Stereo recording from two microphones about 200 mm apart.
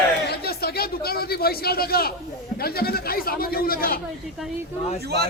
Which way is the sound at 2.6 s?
50° left (ahead or behind).